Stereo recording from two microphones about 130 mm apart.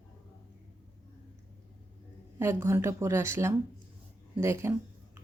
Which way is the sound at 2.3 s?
20° right (ahead or behind).